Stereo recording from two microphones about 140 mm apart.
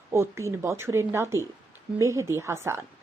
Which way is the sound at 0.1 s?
20° right (ahead or behind).